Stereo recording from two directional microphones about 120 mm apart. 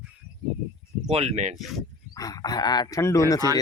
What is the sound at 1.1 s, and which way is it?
Speech, 65° right (ahead or behind).